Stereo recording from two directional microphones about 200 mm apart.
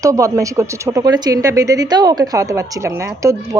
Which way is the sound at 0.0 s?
15° right (ahead or behind).